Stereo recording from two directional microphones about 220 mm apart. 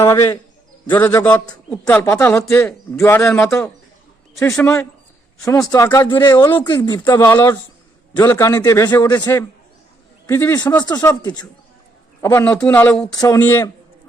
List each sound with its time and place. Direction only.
0.0 s speech: 10° left (ahead or behind)